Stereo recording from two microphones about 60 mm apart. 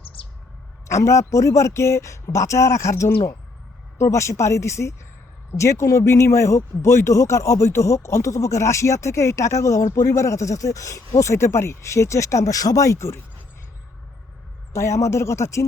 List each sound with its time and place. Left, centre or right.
0.9 s speech: left
3.9 s speech: left
14.7 s speech: left